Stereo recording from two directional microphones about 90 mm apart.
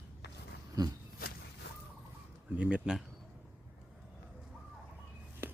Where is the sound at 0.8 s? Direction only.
45° right (ahead or behind).